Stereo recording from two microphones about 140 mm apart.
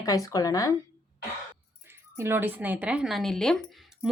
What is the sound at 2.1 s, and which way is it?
Speech, 15° right (ahead or behind).